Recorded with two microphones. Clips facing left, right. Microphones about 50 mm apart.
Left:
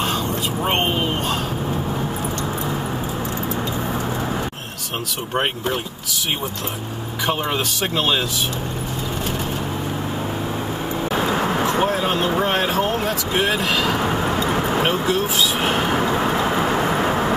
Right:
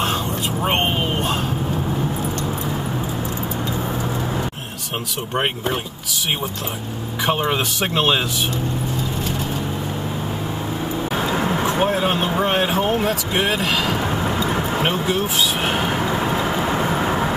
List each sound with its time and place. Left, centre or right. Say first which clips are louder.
7.2 s speech: right 2 dB; centre
7.8 s speech: right 2 dB; right
11.6 s vehicle: even; centre
12.4 s a sound: even; centre
14.8 s speech: left 1 dB; centre